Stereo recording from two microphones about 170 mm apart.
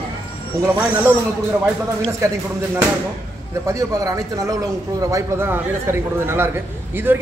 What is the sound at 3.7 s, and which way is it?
Speech, 20° right (ahead or behind).